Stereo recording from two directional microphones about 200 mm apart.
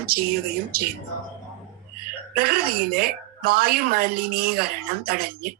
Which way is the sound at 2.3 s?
50° right (ahead or behind).